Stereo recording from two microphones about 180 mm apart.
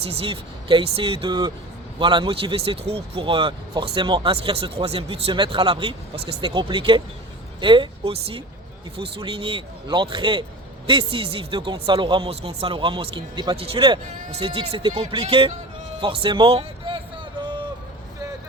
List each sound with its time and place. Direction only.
0.0 s speech: 35° right (ahead or behind)